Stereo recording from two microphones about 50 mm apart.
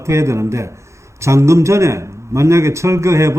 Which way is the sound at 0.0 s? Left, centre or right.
Right.